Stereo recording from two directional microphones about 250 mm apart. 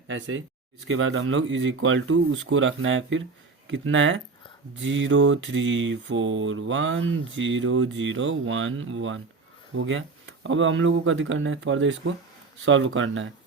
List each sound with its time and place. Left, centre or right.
0.1 s mantra: right